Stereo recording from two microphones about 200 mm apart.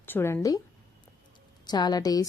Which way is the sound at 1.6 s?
20° left (ahead or behind).